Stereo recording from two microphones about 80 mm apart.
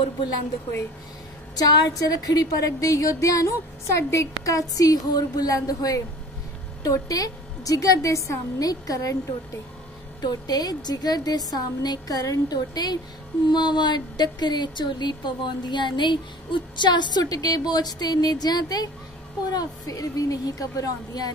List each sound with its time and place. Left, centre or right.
1.6 s a woman's voice: left
10.2 s a woman's voice: left